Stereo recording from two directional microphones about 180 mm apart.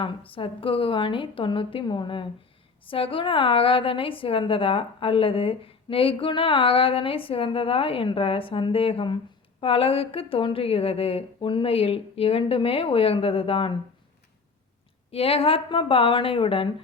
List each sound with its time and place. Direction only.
0.3 s a woman's voice: 30° left (ahead or behind)
15.1 s a woman's voice: 30° left (ahead or behind)